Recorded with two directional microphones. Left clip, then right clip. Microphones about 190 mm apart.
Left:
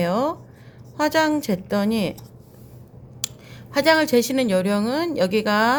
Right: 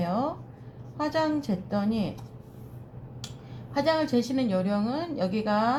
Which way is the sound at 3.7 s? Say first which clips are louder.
Left 8 dB; 65° left (ahead or behind).